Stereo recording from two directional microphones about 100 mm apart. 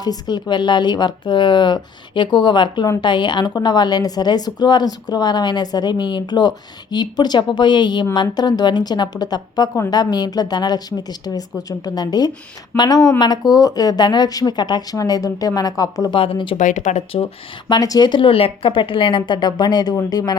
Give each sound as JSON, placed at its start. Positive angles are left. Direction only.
{"t": 0.0, "sound": "speech", "side_deg": 45}
{"t": 16.1, "sound": "speech", "side_deg": 65}
{"t": 17.7, "sound": "speech", "side_deg": 40}
{"t": 18.3, "sound": "speech", "side_deg": 70}